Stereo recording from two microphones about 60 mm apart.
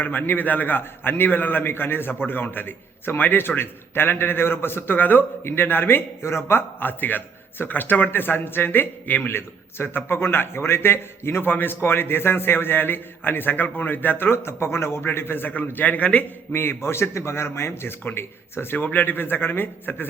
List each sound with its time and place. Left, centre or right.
0.0 s a man's voice: left
16.5 s a man's voice: left